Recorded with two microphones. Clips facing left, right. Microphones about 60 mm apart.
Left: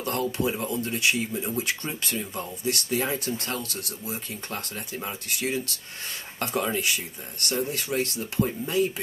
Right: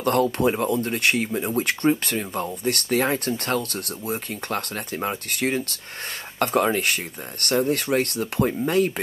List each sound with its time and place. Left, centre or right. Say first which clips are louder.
0.0 s speech: right 7 dB; right